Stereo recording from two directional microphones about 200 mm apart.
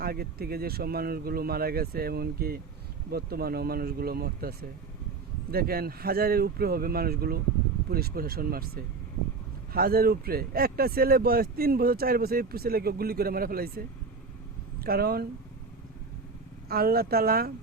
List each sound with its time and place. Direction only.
0.0 s speech: 50° right (ahead or behind)
16.6 s speech: 50° right (ahead or behind)